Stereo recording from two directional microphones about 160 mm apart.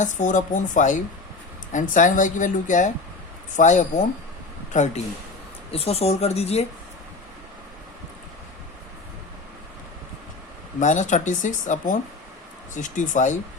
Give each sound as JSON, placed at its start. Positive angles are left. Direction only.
{"t": 0.0, "sound": "a woman's voice", "side_deg": 50}
{"t": 5.7, "sound": "speech", "side_deg": 40}
{"t": 10.8, "sound": "a woman's voice", "side_deg": 50}